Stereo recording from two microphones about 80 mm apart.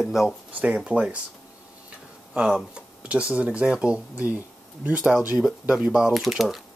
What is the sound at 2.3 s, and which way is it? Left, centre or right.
Speech, centre.